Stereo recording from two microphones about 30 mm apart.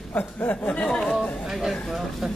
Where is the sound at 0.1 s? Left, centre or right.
Left.